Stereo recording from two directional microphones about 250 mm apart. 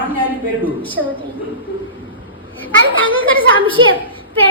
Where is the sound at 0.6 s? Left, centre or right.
Centre.